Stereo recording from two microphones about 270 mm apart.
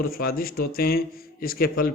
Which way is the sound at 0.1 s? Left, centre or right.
Left.